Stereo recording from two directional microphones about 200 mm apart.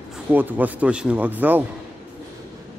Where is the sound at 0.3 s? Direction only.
10° right (ahead or behind).